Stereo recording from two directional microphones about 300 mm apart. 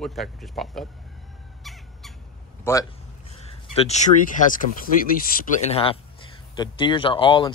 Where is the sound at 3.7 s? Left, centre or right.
Left.